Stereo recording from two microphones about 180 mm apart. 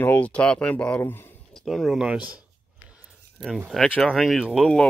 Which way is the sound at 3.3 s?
Centre (ahead or behind).